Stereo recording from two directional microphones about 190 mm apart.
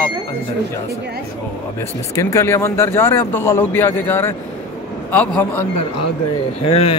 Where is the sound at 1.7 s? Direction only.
15° left (ahead or behind).